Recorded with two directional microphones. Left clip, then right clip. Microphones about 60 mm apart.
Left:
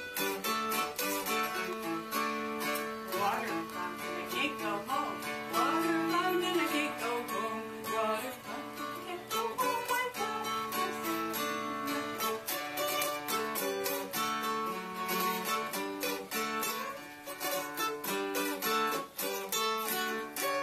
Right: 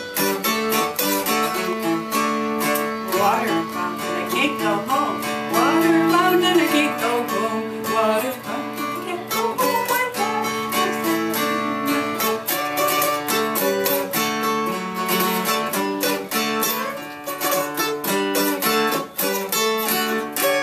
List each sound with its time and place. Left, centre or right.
0.2 s music: centre
10.2 s music: centre
17.7 s music: centre